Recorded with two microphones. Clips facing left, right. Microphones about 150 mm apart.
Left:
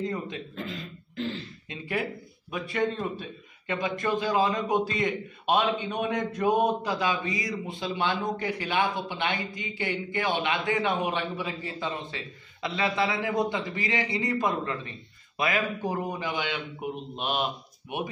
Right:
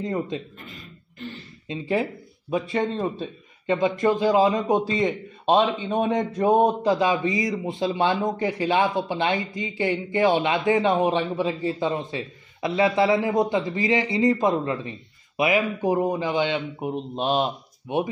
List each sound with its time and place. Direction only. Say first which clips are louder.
0.6 s throat clearing: left 7 dB; 90° left
1.7 s a man's voice: right 7 dB; 25° right (ahead or behind)